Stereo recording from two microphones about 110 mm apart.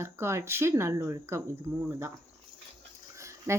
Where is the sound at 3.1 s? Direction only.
25° right (ahead or behind).